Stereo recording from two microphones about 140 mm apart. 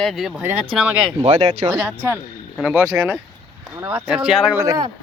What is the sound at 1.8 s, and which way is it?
Speech, 15° right (ahead or behind).